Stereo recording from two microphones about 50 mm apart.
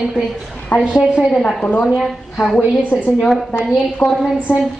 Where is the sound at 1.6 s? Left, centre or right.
Centre.